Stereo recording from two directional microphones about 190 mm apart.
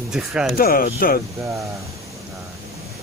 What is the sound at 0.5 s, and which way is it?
Speech, 50° left (ahead or behind).